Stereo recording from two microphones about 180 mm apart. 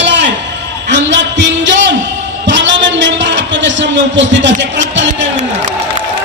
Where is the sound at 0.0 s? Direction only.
75° right (ahead or behind).